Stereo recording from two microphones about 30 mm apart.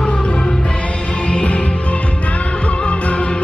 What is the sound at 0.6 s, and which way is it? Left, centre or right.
Music, left.